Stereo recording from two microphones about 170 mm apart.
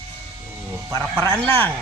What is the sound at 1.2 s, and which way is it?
Speech, 10° left (ahead or behind).